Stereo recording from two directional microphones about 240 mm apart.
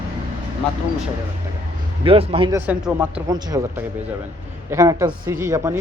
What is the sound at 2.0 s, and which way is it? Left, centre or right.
Speech, right.